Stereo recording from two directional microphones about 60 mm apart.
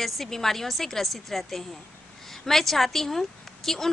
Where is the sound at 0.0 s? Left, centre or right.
Centre.